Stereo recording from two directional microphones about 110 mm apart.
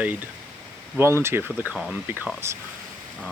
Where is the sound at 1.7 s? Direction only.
10° right (ahead or behind).